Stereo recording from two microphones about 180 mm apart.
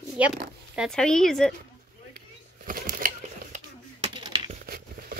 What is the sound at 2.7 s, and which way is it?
Crumpling, 50° right (ahead or behind).